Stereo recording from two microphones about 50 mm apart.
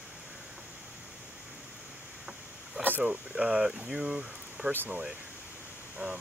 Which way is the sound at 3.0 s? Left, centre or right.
Centre.